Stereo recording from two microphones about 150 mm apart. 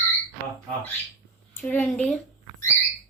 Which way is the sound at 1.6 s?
15° left (ahead or behind).